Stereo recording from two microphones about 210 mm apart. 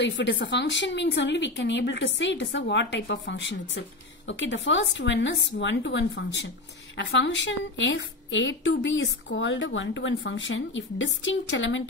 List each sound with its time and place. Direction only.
0.0 s a woman's voice: 60° left (ahead or behind)